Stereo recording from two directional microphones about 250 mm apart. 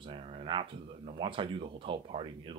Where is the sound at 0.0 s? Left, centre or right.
Right.